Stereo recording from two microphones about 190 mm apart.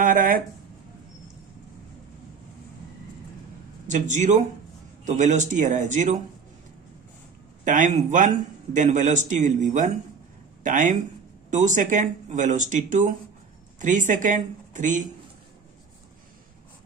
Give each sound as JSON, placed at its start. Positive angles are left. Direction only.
{"t": 0.0, "sound": "a sound", "side_deg": -45}
{"t": 3.8, "sound": "a man's voice", "side_deg": -40}
{"t": 7.6, "sound": "a man's voice", "side_deg": -40}